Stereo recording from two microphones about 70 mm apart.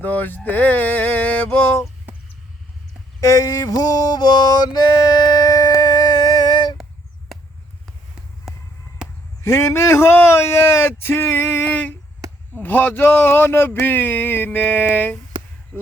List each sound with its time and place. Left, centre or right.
0.0 s speech: left
3.2 s music: left
8.5 s a sound: centre
9.4 s speech: left
11.7 s a sound: left
12.5 s speech: left
15.7 s crow: left